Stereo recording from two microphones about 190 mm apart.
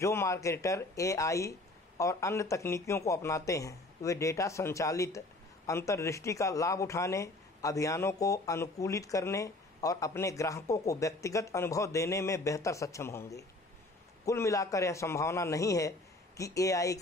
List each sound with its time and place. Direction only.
0.0 s speech: 15° left (ahead or behind)